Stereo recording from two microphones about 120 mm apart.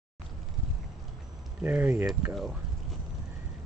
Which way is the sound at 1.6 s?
15° right (ahead or behind).